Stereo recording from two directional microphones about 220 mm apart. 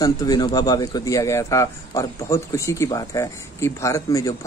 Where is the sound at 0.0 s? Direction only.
15° left (ahead or behind).